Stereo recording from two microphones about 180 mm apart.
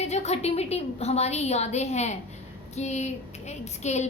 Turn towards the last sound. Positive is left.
turn(degrees=40)  # may be behind; listen again after turning